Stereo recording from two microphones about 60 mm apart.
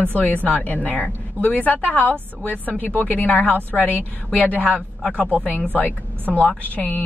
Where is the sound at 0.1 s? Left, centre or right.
Left.